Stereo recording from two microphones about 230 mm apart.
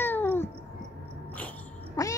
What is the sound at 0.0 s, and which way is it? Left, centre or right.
Cat, centre.